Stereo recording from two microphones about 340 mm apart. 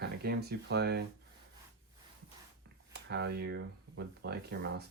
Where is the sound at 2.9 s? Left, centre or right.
Right.